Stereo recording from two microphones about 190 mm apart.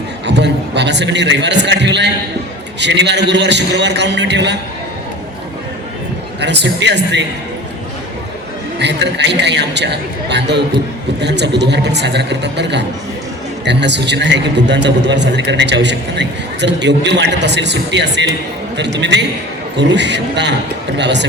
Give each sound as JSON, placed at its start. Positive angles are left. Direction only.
{"t": 0.3, "sound": "a man's voice", "side_deg": -65}
{"t": 6.4, "sound": "a man's voice", "side_deg": -65}
{"t": 8.8, "sound": "a man's voice", "side_deg": -65}